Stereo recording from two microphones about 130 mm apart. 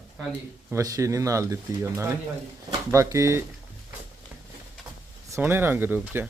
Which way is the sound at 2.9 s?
25° right (ahead or behind).